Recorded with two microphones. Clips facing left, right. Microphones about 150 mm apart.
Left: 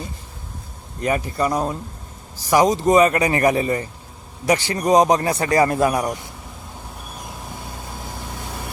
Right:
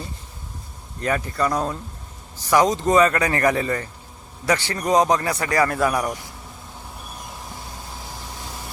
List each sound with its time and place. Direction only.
1.0 s speech: 15° left (ahead or behind)
8.2 s vehicle: 60° left (ahead or behind)